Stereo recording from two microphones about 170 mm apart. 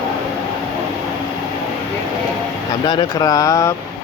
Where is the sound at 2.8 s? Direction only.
25° left (ahead or behind).